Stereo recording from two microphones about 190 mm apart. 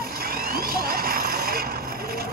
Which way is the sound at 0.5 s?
50° right (ahead or behind).